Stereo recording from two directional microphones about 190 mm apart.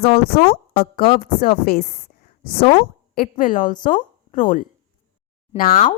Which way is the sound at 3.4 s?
45° left (ahead or behind).